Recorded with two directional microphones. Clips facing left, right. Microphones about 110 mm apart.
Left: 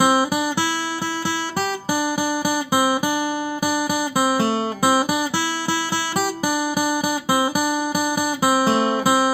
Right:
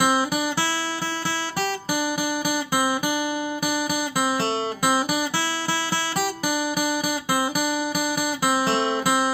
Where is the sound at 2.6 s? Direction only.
15° left (ahead or behind).